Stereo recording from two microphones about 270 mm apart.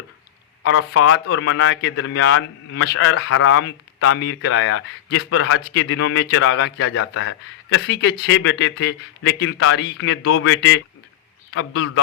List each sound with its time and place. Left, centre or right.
0.6 s a man's voice: left
8.4 s a man's voice: left